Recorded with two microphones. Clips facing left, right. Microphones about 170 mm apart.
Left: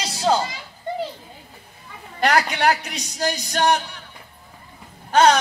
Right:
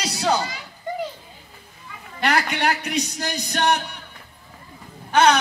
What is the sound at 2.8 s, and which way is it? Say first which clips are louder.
Music: even; 60° right (ahead or behind).